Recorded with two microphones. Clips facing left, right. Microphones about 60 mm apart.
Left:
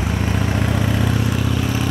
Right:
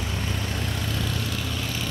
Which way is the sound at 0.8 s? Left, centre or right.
Left.